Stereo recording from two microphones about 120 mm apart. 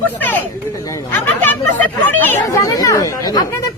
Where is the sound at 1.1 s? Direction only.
15° left (ahead or behind).